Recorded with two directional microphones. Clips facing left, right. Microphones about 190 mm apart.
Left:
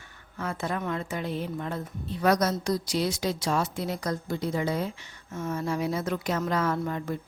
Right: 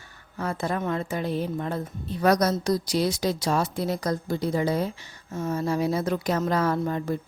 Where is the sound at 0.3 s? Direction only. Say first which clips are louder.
Right 3 dB; 35° right (ahead or behind).